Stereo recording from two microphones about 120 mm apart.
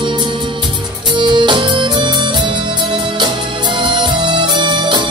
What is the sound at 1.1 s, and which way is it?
Music, 40° right (ahead or behind).